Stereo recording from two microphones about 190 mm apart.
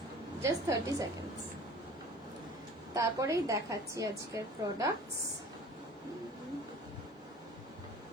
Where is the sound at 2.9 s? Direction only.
15° right (ahead or behind).